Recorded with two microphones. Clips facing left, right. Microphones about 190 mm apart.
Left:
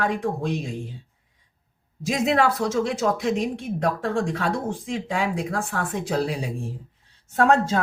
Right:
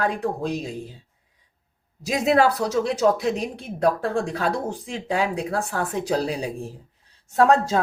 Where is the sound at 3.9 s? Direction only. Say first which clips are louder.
Even; 35° right (ahead or behind).